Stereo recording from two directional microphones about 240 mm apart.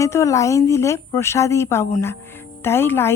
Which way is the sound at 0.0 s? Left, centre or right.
Centre.